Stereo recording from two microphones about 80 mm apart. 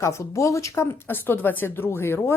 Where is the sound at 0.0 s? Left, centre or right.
Left.